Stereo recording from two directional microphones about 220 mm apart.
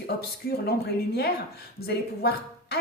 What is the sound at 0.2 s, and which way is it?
Speech, 45° left (ahead or behind).